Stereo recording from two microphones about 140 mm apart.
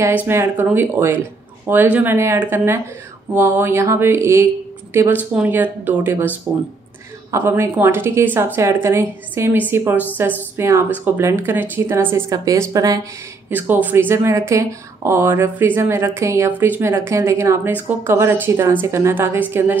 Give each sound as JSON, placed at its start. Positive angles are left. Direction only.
{"t": 0.0, "sound": "speech", "side_deg": -15}
{"t": 13.5, "sound": "speech", "side_deg": -10}